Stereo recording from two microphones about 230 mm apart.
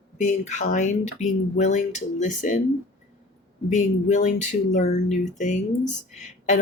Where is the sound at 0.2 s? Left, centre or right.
Left.